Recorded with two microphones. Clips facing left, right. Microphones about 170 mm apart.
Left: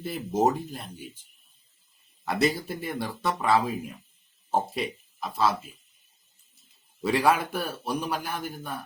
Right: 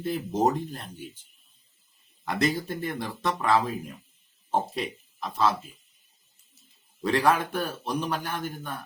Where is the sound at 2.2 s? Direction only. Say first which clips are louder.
Left 1 dB; 10° left (ahead or behind).